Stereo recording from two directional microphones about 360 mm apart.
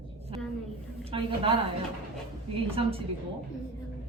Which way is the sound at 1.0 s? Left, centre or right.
Centre.